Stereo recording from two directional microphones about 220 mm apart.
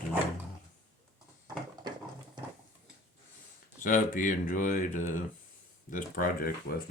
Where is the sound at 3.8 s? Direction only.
35° left (ahead or behind).